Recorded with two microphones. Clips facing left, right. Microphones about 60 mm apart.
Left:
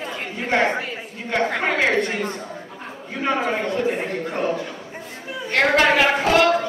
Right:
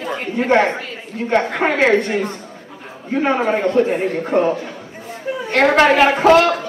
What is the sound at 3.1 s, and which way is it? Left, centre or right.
A man's voice, right.